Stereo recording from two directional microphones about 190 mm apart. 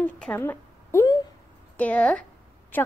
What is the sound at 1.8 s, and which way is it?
A woman's voice, 5° left (ahead or behind).